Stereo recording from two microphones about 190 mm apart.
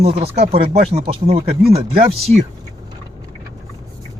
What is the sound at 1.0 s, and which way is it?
Speech, 30° right (ahead or behind).